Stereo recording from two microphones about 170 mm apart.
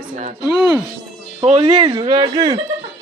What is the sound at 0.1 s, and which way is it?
Speech, 40° right (ahead or behind).